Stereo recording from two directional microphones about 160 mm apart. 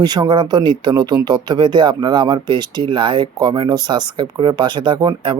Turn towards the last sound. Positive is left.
turn(degrees=-30)  # may be behind; listen again after turning